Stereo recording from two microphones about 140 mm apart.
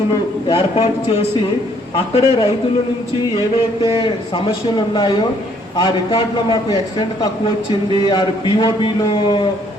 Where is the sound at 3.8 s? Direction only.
35° left (ahead or behind).